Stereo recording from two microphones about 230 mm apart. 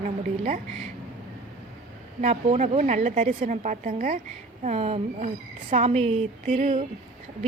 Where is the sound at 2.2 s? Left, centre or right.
Right.